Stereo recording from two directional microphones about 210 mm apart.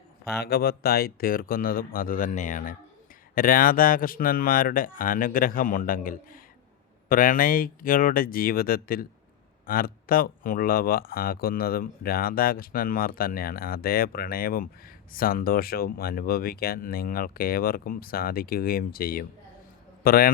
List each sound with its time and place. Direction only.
0.3 s speech: 50° left (ahead or behind)